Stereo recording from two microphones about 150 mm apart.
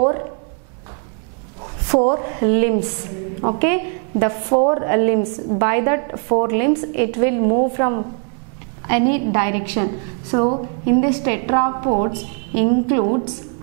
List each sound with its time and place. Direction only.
1.9 s a woman's voice: 10° right (ahead or behind)